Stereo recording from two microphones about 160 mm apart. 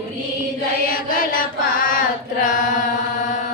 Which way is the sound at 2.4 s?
50° left (ahead or behind).